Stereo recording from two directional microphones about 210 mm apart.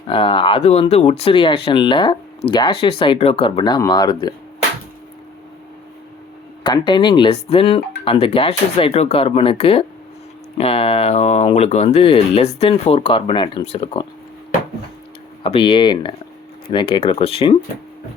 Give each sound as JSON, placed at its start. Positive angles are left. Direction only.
{"t": 0.1, "sound": "speech", "side_deg": 25}
{"t": 6.6, "sound": "speech", "side_deg": 20}
{"t": 15.4, "sound": "speech", "side_deg": 25}